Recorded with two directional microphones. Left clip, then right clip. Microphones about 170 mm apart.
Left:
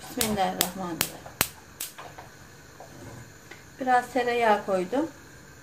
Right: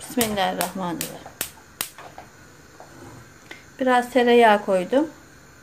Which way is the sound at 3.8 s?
60° right (ahead or behind).